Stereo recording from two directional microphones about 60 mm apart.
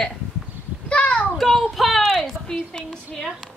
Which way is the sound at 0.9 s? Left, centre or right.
Left.